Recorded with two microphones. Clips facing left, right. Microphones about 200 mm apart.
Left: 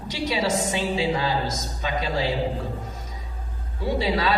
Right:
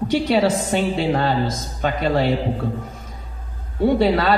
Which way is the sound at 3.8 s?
60° right (ahead or behind).